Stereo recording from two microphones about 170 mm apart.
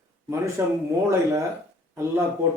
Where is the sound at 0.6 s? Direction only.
15° right (ahead or behind).